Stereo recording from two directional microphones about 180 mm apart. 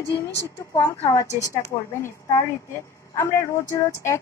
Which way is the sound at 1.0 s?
15° left (ahead or behind).